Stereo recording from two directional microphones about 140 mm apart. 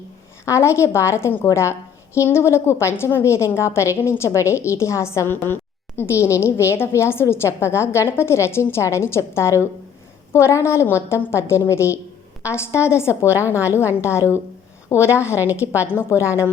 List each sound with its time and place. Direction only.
0.4 s a woman's voice: 20° left (ahead or behind)
15.4 s a woman's voice: 15° right (ahead or behind)
15.8 s a woman's voice: 15° left (ahead or behind)